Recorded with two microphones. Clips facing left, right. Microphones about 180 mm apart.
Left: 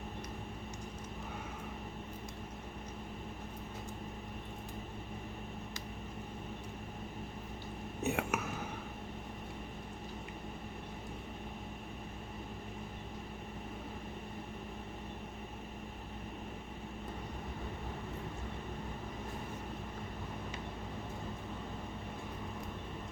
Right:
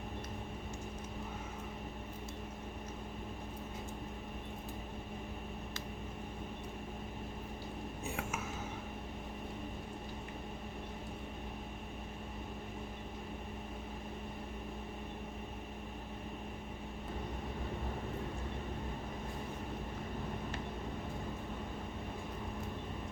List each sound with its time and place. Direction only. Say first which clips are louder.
8.0 s whispering: left 8 dB; 70° left (ahead or behind)